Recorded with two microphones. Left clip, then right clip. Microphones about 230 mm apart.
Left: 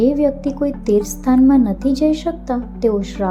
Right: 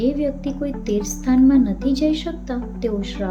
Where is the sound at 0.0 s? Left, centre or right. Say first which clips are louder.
Left 6 dB; centre.